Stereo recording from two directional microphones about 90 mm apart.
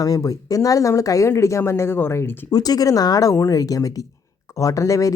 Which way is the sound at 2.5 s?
45° left (ahead or behind).